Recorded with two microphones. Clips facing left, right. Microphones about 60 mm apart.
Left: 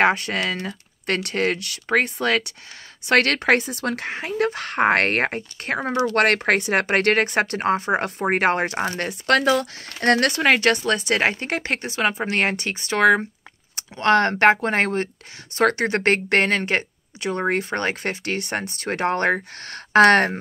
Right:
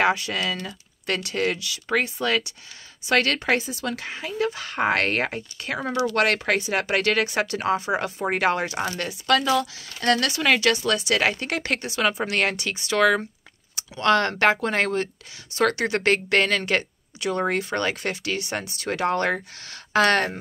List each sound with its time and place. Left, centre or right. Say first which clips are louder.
0.0 s speech: left 3 dB; left
5.8 s speech: left 2 dB; left
6.1 s speech: left 4 dB; left